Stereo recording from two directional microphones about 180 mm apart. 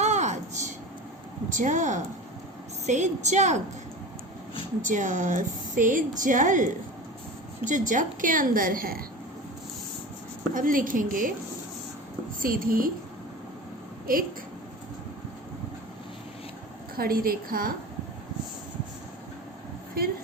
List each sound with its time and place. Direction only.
0.0 s a sound: 40° right (ahead or behind)
1.5 s a woman's voice: 45° right (ahead or behind)
4.8 s speech: 45° right (ahead or behind)
10.5 s speech: 50° right (ahead or behind)
12.4 s speech: 50° right (ahead or behind)
14.1 s a woman's voice: 50° right (ahead or behind)
17.0 s a woman's voice: 55° right (ahead or behind)
20.0 s a sound: 55° right (ahead or behind)